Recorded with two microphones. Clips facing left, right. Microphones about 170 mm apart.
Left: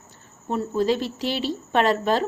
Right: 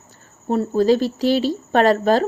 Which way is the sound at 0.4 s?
35° right (ahead or behind).